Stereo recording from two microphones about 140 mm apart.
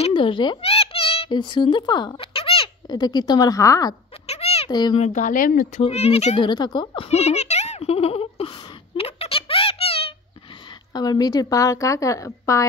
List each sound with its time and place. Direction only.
0.0 s a child's voice: 35° left (ahead or behind)
4.3 s cat: 45° left (ahead or behind)
4.6 s a child's voice: 30° left (ahead or behind)
4.9 s speech: 55° left (ahead or behind); by 5.8 s 85° left
5.8 s speech: 50° left (ahead or behind)
6.4 s a woman's voice: 30° left (ahead or behind)
7.1 s a sound: 50° left (ahead or behind)
10.9 s a woman's voice: 30° left (ahead or behind)